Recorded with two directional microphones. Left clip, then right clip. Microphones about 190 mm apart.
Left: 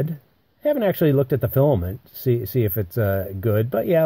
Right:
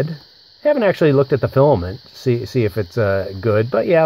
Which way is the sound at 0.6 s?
50° left (ahead or behind).